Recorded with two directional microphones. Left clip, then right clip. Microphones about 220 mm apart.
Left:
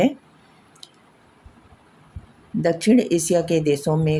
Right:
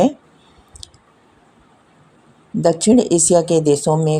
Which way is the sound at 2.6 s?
15° right (ahead or behind).